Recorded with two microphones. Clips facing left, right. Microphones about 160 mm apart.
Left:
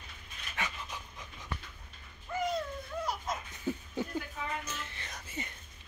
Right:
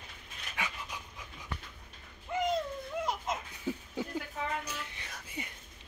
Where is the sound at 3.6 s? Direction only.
10° right (ahead or behind).